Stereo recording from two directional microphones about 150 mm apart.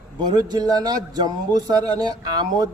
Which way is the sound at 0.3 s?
25° right (ahead or behind).